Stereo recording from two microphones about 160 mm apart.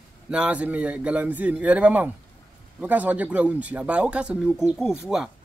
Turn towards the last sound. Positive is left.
turn(degrees=-5)  # may be behind; listen again after turning